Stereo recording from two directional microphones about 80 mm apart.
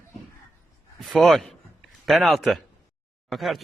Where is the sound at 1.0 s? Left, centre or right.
Centre.